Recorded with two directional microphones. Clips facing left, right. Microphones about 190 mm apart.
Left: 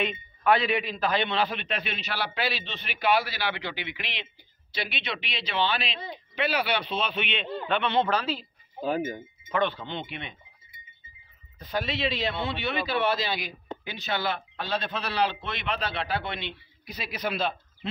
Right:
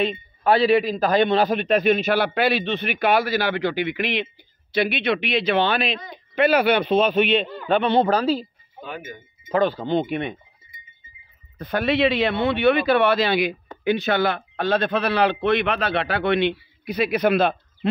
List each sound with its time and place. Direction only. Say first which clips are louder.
0.0 s a man's voice: right 5 dB; 35° right (ahead or behind)
8.8 s speech: left 7 dB; 35° left (ahead or behind)
9.5 s speech: right 8 dB; 35° right (ahead or behind)
11.5 s a man's voice: right 9 dB; 60° right (ahead or behind)